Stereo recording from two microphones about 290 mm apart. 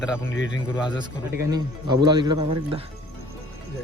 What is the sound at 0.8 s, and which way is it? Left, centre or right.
A man's voice, centre.